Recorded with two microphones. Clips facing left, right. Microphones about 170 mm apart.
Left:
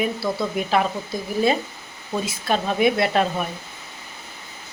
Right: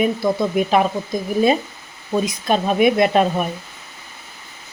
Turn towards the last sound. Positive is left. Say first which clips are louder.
# right 5 dB
turn(degrees=-20)  # may be behind; listen again after turning